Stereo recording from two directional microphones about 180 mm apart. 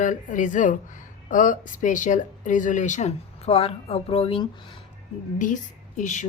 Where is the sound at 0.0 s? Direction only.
45° left (ahead or behind); by 4.8 s 30° left (ahead or behind).